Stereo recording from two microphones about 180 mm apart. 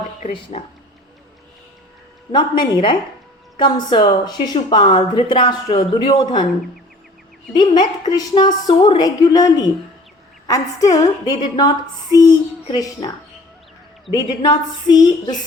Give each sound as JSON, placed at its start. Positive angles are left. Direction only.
{"t": 0.2, "sound": "speech", "side_deg": 45}
{"t": 2.3, "sound": "a woman's voice", "side_deg": 25}
{"t": 7.5, "sound": "a woman's voice", "side_deg": 25}
{"t": 14.1, "sound": "a woman's voice", "side_deg": 20}